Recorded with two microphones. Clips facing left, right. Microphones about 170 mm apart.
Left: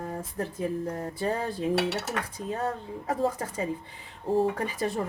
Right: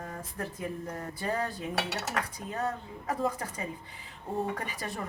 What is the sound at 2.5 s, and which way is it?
A woman's voice, 30° left (ahead or behind).